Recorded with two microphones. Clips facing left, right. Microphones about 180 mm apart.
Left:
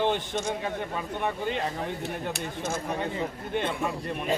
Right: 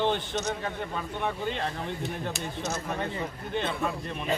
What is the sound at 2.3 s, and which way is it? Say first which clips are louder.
Speech: left 1 dB; 50° left (ahead or behind).